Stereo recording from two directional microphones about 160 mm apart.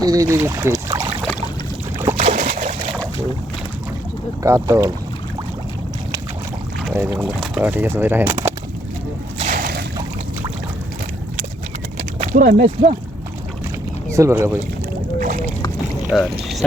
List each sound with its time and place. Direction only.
0.0 s speech: 20° right (ahead or behind)
2.1 s boat: 45° right (ahead or behind)
4.4 s speech: 20° right (ahead or behind)
6.9 s speech: 10° right (ahead or behind)
9.4 s a sound: 60° right (ahead or behind)
12.2 s speech: 55° right (ahead or behind)
12.6 s speech: 40° right (ahead or behind)
14.1 s speech: 15° right (ahead or behind)
15.2 s boat: 55° right (ahead or behind)
16.1 s speech: centre (ahead or behind)